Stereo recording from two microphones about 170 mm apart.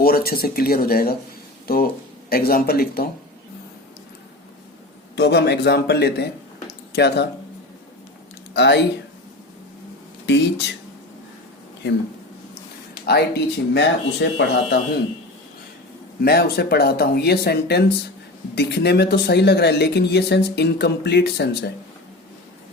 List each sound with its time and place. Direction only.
0.0 s speech: 60° left (ahead or behind)
5.1 s speech: 75° left (ahead or behind)
8.5 s speech: 90° left
10.3 s speech: 90° left
13.1 s speech: 75° left (ahead or behind); by 14.8 s 90° left
16.2 s speech: 65° left (ahead or behind)